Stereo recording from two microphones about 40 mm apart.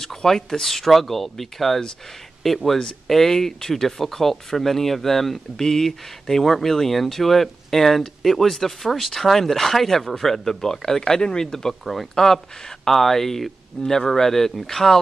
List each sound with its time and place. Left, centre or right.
0.0 s speech: centre
11.8 s speech: centre
12.2 s speech: centre